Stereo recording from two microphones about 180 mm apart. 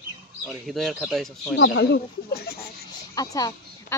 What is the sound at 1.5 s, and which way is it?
Speech, 70° left (ahead or behind).